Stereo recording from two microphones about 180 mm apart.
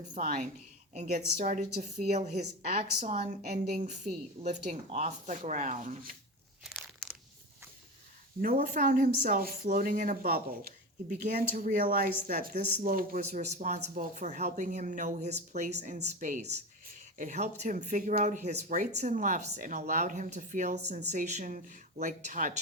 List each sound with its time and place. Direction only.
0.1 s speech: 45° right (ahead or behind)
6.7 s crunch: centre (ahead or behind)
8.6 s speech: 50° right (ahead or behind)